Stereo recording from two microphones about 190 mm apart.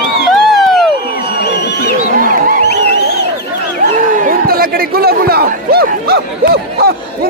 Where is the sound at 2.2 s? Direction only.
45° right (ahead or behind).